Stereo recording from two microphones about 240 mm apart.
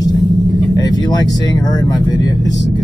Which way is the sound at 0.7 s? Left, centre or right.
Centre.